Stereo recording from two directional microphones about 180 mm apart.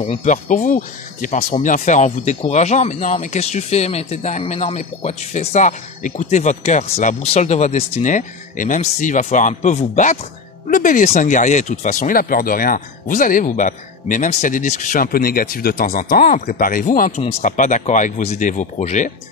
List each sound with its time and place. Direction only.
0.0 s speech: 40° left (ahead or behind)